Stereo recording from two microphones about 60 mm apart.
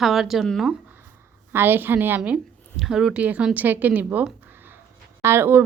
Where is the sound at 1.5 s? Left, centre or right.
Right.